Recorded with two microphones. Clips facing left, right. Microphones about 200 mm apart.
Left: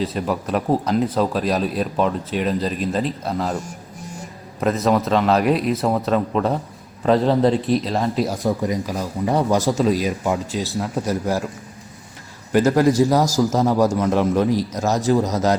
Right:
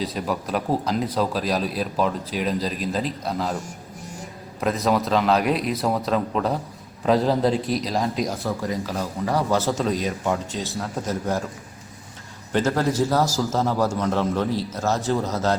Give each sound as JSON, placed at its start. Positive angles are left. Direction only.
{"t": 0.0, "sound": "speech", "side_deg": 0}
{"t": 4.6, "sound": "speech", "side_deg": 0}
{"t": 8.4, "sound": "a man's voice", "side_deg": 20}
{"t": 12.5, "sound": "a man's voice", "side_deg": 10}